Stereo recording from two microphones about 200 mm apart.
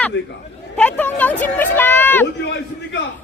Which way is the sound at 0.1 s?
60° left (ahead or behind).